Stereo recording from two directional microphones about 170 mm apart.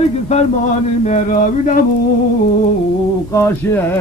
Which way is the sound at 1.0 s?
50° left (ahead or behind).